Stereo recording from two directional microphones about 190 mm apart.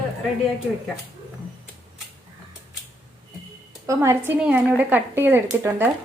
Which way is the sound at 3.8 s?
15° right (ahead or behind).